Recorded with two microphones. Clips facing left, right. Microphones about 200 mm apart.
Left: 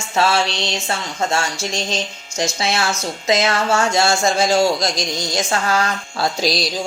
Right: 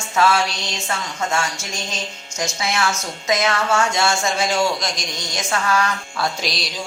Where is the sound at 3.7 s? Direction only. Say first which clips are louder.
Left 4 dB; 40° left (ahead or behind).